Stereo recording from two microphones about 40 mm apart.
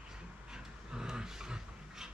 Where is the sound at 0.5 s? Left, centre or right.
Centre.